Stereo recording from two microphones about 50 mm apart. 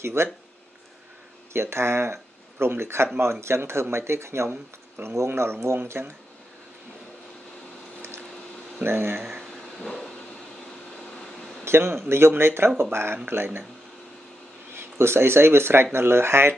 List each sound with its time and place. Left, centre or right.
0.0 s speech: right
1.5 s speech: right
5.9 s speech: right
8.8 s speech: right
11.6 s a man's voice: right
14.7 s speech: right